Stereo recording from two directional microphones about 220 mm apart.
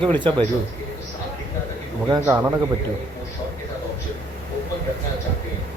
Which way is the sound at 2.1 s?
10° right (ahead or behind).